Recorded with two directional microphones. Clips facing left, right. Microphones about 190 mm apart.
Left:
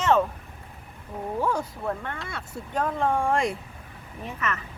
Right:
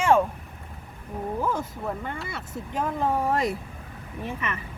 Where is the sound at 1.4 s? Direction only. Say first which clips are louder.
Left 3 dB; 5° right (ahead or behind).